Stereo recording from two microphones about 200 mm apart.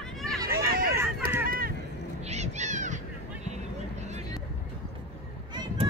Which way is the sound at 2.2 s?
35° right (ahead or behind).